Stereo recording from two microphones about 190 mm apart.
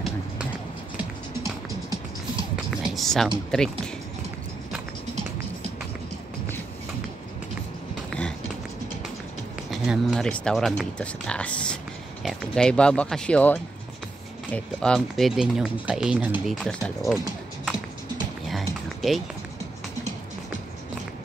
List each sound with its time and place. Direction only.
2.7 s a sound: centre (ahead or behind)
3.5 s speech: 5° left (ahead or behind)
9.7 s speech: centre (ahead or behind)
18.5 s music: centre (ahead or behind)